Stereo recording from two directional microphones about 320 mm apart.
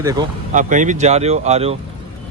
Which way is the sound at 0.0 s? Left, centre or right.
Centre.